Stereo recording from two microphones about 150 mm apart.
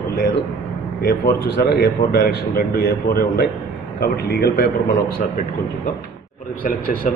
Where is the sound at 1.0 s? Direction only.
90° left.